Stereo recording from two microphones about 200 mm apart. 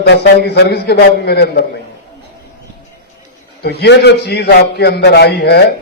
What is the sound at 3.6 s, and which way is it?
A man's voice, 55° left (ahead or behind).